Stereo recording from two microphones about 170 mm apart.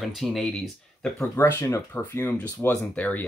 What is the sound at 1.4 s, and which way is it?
Speech, 15° left (ahead or behind).